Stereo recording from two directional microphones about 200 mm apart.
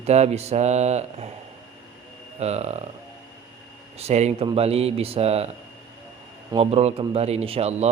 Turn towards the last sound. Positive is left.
turn(degrees=-30)  # may be behind; listen again after turning